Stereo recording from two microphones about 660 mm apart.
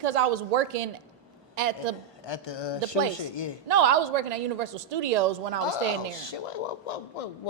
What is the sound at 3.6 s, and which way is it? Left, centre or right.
A woman's voice, right.